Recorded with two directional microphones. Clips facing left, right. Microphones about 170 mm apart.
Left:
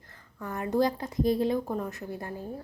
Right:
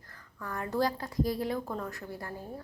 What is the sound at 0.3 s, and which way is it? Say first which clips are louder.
A woman's voice: left 4 dB; 20° left (ahead or behind).